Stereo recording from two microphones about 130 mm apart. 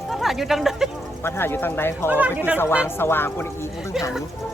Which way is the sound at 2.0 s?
15° right (ahead or behind).